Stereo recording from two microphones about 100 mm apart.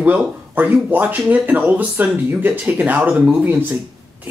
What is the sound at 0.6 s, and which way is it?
Speech, 20° right (ahead or behind).